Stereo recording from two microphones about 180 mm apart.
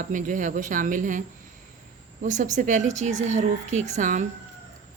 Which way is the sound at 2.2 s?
45° right (ahead or behind).